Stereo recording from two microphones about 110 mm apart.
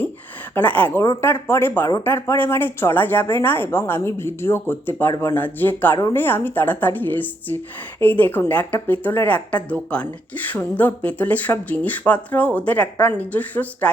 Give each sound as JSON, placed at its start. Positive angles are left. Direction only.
{"t": 0.5, "sound": "speech", "side_deg": 15}